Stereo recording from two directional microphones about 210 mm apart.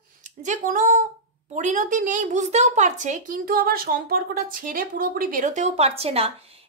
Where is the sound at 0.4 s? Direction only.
35° right (ahead or behind).